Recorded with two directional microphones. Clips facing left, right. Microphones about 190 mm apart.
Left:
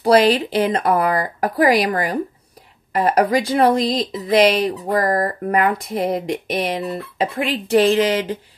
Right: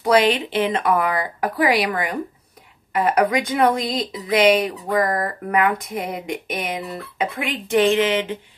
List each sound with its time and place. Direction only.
0.0 s speech: 35° left (ahead or behind)